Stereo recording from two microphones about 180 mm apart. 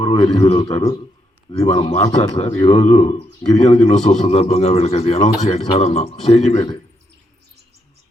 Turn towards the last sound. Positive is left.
turn(degrees=35)  # may be behind; listen again after turning